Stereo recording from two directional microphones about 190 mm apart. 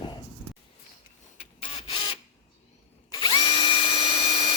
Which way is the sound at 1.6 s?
25° left (ahead or behind).